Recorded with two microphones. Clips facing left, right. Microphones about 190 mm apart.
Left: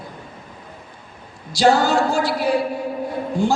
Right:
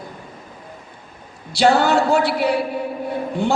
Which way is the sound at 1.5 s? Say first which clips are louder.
Right 1 dB; 65° right (ahead or behind).